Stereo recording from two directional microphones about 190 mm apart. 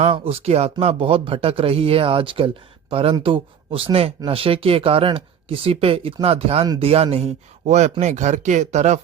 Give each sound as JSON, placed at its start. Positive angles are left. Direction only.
{"t": 0.0, "sound": "a man's voice", "side_deg": -30}